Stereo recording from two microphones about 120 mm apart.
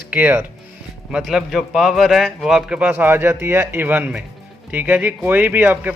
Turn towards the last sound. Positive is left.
turn(degrees=-15)  # may be behind; listen again after turning